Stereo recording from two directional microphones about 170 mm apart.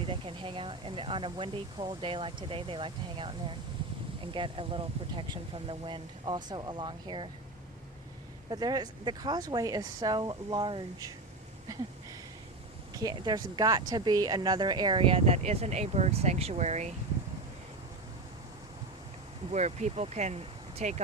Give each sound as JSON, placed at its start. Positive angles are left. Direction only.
{"t": 0.0, "sound": "speech", "side_deg": -30}
{"t": 8.4, "sound": "speech", "side_deg": -25}
{"t": 12.9, "sound": "speech", "side_deg": -20}
{"t": 19.5, "sound": "speech", "side_deg": -40}